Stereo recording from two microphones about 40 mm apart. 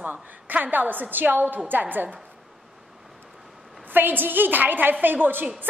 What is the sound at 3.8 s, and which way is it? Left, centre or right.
A woman's voice, right.